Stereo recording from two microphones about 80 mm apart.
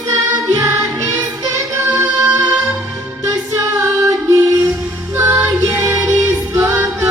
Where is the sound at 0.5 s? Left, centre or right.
Right.